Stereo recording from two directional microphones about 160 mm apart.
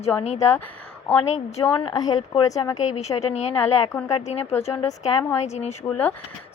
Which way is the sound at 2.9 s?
40° left (ahead or behind).